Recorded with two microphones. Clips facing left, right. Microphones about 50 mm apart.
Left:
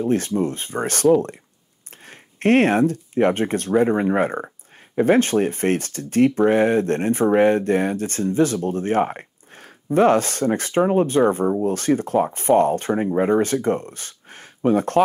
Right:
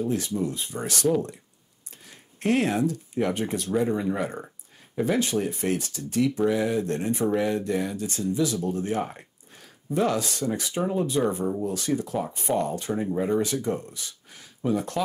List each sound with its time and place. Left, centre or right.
0.0 s speech: left
2.0 s speech: left